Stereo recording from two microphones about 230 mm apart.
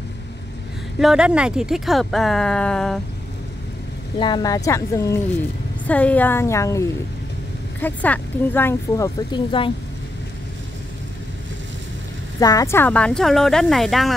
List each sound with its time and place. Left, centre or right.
0.9 s speech: centre
4.2 s speech: centre
12.4 s speech: centre